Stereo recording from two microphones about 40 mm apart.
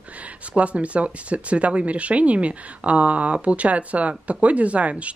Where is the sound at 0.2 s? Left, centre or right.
Right.